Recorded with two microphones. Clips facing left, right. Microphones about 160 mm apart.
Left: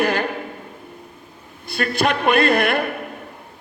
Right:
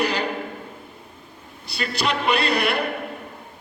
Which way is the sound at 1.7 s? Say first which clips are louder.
Left 5 dB; 50° left (ahead or behind).